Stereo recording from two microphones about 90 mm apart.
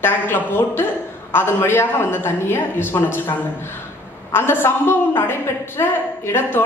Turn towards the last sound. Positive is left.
turn(degrees=25)  # may be behind; listen again after turning